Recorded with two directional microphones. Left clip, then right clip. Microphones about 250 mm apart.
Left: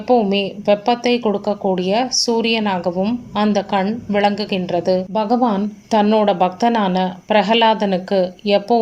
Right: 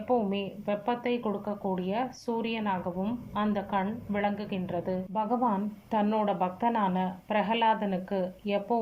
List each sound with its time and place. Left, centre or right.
0.1 s a woman's voice: left